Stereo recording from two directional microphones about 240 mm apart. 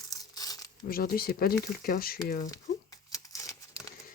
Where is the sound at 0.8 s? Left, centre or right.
Left.